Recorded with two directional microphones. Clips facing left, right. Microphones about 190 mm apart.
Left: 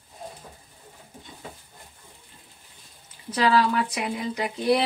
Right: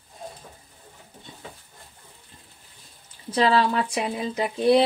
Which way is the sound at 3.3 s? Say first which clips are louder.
Right 1 dB; 30° right (ahead or behind).